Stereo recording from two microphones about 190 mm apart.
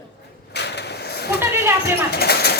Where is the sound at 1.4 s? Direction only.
10° right (ahead or behind).